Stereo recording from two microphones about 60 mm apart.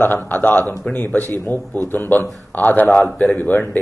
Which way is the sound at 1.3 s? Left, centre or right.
Right.